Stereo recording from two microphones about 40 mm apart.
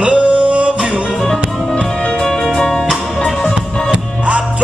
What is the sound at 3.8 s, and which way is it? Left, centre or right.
Music, right.